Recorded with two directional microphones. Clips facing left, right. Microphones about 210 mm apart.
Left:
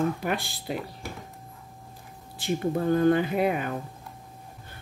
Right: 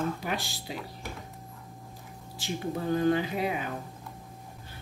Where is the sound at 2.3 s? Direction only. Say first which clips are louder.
Left 6 dB; 55° left (ahead or behind).